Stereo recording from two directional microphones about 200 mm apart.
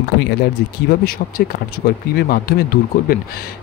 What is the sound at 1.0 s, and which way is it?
Speech, 45° left (ahead or behind).